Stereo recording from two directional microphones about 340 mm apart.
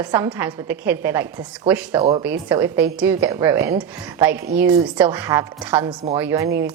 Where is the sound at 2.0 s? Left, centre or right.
Centre.